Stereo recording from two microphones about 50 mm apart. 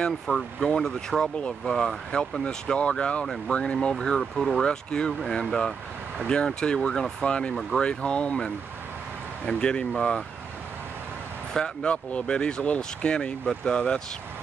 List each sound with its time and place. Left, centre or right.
0.3 s speech: centre
2.4 s speech: centre
4.2 s speech: centre
4.6 s speech: centre
9.5 s speech: centre
11.5 s speech: centre